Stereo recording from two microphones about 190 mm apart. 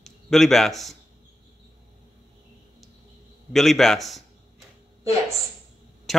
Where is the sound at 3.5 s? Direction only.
Centre (ahead or behind).